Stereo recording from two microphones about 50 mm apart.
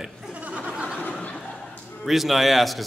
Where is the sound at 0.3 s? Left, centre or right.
Right.